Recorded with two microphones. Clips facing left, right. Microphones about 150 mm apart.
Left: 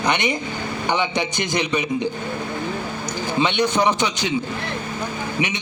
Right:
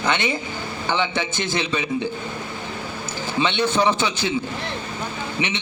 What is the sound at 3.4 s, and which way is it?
Speech, 15° left (ahead or behind).